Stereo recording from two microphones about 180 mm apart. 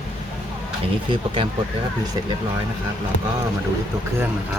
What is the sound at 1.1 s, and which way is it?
Speech, 30° right (ahead or behind).